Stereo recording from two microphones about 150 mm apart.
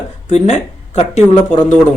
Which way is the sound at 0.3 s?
50° left (ahead or behind).